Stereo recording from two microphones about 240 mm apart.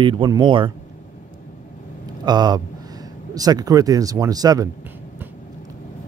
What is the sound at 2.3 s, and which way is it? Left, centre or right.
Speech, centre.